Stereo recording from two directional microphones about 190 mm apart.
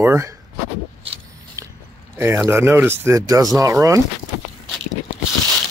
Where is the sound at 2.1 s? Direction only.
10° right (ahead or behind).